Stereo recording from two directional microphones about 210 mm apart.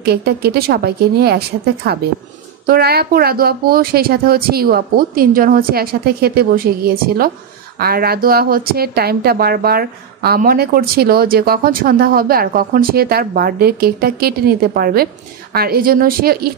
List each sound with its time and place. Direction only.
0.0 s speech: 50° right (ahead or behind)